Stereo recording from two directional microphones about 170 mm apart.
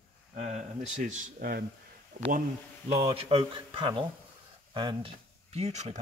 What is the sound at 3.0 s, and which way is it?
Speech, 35° right (ahead or behind).